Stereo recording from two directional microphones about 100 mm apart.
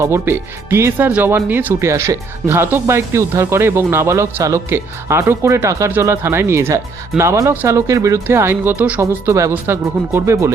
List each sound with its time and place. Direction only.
0.0 s speech: 25° right (ahead or behind)
8.7 s speech: 15° right (ahead or behind)
9.0 s speech: 30° right (ahead or behind)